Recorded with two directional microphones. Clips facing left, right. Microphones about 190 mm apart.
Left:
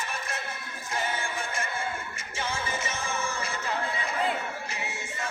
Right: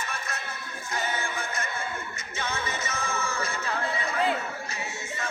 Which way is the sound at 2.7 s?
30° left (ahead or behind).